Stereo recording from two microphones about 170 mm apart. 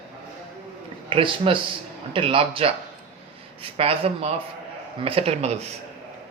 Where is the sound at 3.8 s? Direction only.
35° right (ahead or behind).